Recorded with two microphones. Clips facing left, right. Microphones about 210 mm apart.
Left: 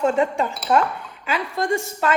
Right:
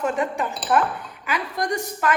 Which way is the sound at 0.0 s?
25° left (ahead or behind).